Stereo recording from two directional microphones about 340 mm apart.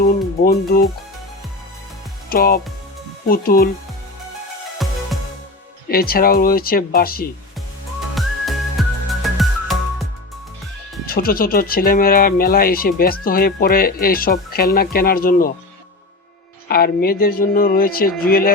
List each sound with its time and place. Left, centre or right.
0.0 s speech: left
2.3 s speech: left
4.8 s music: centre
5.9 s speech: left
8.1 s whistling: centre
9.2 s music: centre
11.0 s speech: left
16.6 s speech: left